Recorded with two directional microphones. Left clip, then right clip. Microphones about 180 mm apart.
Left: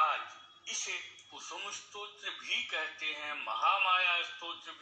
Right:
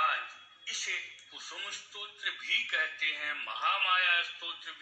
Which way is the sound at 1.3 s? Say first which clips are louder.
Right 1 dB; 40° left (ahead or behind).